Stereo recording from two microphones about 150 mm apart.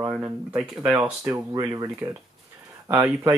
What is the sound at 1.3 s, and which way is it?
Speech, 25° right (ahead or behind).